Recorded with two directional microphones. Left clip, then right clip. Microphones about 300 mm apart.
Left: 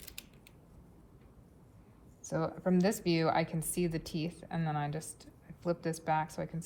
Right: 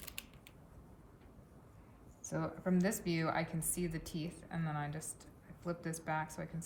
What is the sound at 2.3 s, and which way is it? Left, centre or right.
A woman's voice, centre.